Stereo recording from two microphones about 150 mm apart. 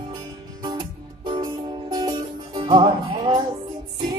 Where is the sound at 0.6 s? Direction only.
30° right (ahead or behind).